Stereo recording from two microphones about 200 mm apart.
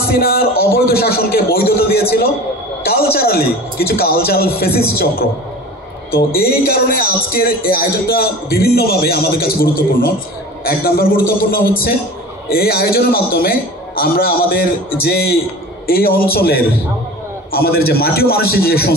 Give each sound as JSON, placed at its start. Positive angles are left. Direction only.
{"t": 0.0, "sound": "speech", "side_deg": 50}